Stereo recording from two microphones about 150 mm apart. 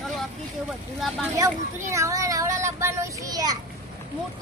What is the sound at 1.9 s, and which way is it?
Speech, 20° right (ahead or behind).